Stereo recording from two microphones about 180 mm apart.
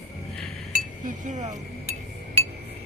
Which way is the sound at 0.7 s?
45° right (ahead or behind).